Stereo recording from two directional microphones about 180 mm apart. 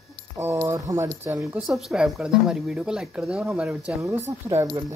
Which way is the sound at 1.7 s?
Centre (ahead or behind).